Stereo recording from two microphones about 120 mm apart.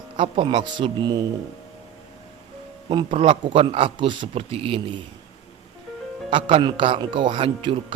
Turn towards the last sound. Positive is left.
turn(degrees=-45)  # may be behind; listen again after turning